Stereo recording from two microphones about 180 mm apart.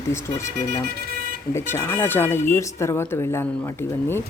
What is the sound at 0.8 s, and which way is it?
Vehicle, 60° right (ahead or behind).